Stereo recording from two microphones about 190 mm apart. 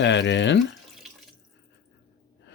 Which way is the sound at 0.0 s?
70° left (ahead or behind).